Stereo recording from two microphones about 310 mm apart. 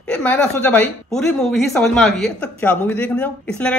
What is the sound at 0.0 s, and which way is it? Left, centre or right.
Speech, centre.